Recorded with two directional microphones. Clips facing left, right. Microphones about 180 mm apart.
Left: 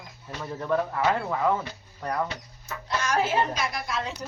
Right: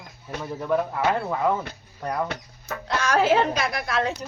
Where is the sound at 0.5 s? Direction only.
10° right (ahead or behind).